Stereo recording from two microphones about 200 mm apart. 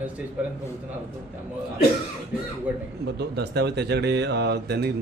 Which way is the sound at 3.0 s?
55° right (ahead or behind).